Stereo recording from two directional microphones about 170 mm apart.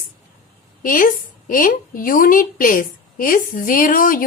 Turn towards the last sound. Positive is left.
turn(degrees=55)  # may be behind; listen again after turning